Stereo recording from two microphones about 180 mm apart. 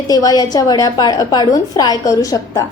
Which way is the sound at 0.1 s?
20° left (ahead or behind).